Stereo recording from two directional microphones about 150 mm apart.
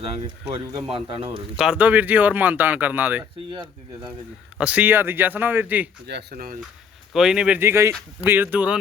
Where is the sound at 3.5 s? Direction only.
30° right (ahead or behind).